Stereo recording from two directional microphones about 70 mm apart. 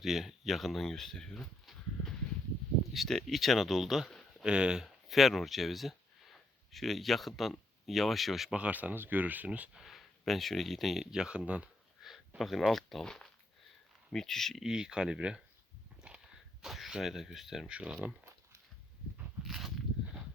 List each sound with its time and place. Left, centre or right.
0.0 s speech: centre
4.4 s speech: centre
8.5 s speech: centre
9.9 s speech: centre
12.0 s a sound: centre
12.4 s speech: centre
14.6 s speech: centre
16.0 s a sound: centre
17.7 s speech: centre
19.5 s a sound: centre